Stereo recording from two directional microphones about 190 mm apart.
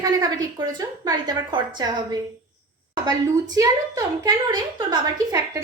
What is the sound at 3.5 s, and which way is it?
A woman's voice, 20° right (ahead or behind).